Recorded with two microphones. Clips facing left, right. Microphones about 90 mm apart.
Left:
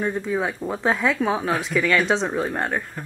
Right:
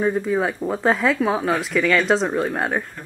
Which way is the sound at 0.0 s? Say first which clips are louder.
Right 4 dB; 5° right (ahead or behind).